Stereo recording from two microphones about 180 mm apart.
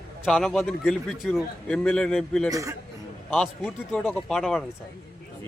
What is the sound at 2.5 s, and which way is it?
Speech, 15° right (ahead or behind).